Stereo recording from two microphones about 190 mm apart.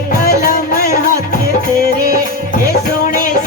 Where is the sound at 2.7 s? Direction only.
45° left (ahead or behind).